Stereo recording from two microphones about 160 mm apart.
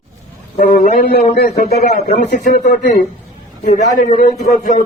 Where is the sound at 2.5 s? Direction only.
55° left (ahead or behind).